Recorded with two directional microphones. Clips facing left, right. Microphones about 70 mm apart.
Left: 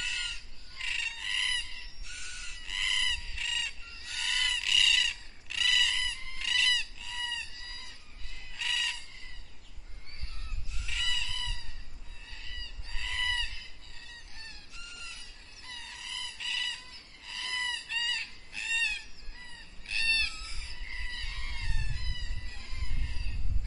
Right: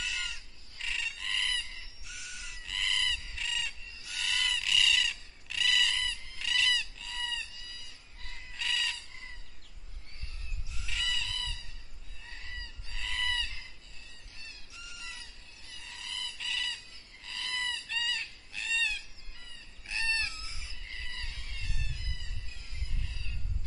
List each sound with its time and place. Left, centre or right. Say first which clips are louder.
0.0 s bird: even; centre
2.0 s owl: even; centre
7.5 s chicken: left 2 dB; left
8.5 s bird: even; centre
10.7 s owl: even; centre
12.9 s fowl: even; centre
14.7 s bird: right 3 dB; centre
19.9 s chicken: left 1 dB; right
20.2 s chicken: right 1 dB; centre
21.3 s a sound: left 3 dB; left